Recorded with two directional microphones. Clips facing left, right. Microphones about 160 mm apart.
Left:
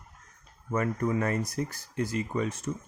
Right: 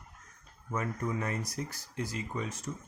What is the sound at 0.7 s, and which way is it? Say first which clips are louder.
Speech: left 6 dB; 60° left (ahead or behind).